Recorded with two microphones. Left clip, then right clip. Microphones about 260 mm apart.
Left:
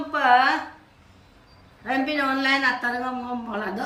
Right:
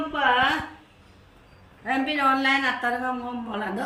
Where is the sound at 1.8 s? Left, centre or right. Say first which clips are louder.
Right 1 dB; centre.